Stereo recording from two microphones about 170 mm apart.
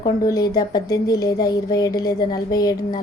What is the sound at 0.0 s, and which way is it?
Speech, 20° left (ahead or behind).